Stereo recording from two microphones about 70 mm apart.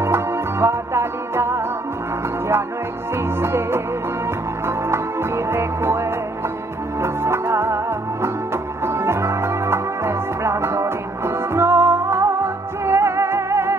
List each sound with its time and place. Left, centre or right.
0.0 s music: right
3.2 s music: right